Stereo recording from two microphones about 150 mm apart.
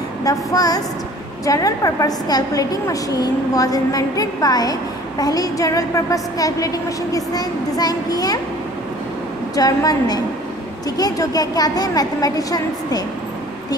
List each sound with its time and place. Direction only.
0.2 s a woman's voice: 25° left (ahead or behind)
9.6 s a woman's voice: 25° left (ahead or behind)